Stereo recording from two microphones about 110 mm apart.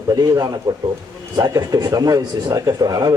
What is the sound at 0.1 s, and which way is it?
A man's voice, 35° right (ahead or behind).